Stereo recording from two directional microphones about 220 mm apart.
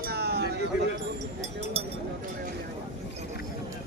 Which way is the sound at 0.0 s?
45° right (ahead or behind).